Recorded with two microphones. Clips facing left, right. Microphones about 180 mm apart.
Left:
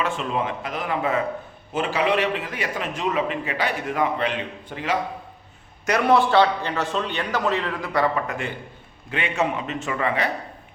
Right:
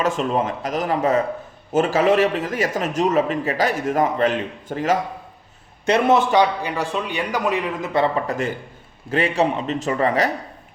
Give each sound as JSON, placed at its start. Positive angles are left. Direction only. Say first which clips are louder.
{"t": 0.0, "sound": "speech", "louder": "right 4 dB", "side_deg": -40}
{"t": 5.8, "sound": "a man's voice", "louder": "right 2 dB", "side_deg": -25}